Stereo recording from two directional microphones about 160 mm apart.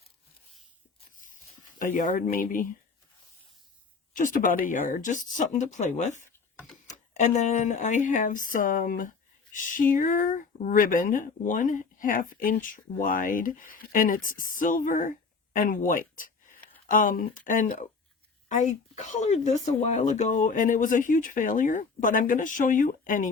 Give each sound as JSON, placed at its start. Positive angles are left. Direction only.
{"t": 1.8, "sound": "speech", "side_deg": 55}
{"t": 4.1, "sound": "speech", "side_deg": 55}